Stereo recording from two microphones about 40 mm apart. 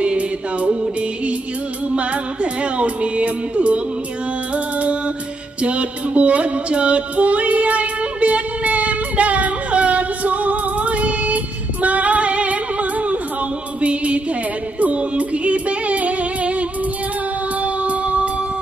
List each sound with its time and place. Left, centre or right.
0.0 s music: right